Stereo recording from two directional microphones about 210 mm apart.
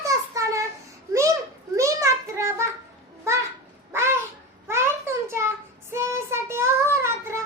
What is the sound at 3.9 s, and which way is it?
Babbling, 10° right (ahead or behind).